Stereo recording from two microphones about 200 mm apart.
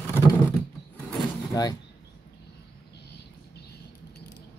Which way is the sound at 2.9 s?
55° left (ahead or behind).